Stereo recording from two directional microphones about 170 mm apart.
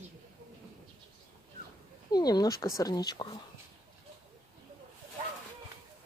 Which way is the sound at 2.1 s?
25° left (ahead or behind).